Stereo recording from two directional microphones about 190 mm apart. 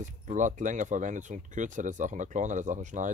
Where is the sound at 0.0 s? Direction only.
40° right (ahead or behind).